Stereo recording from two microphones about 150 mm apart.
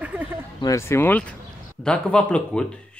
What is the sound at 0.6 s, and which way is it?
Speech, 20° left (ahead or behind).